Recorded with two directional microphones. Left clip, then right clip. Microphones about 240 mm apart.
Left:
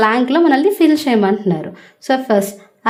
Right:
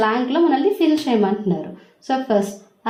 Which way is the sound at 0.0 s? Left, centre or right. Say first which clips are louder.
Left 5 dB; left.